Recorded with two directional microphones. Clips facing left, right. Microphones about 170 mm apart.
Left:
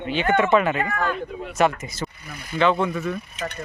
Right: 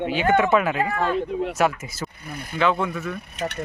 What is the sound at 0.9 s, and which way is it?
Speech, 30° right (ahead or behind).